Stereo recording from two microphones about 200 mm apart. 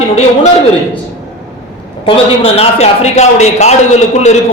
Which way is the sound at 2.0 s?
30° left (ahead or behind).